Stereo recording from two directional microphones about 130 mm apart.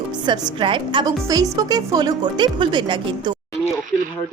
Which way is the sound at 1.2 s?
25° right (ahead or behind).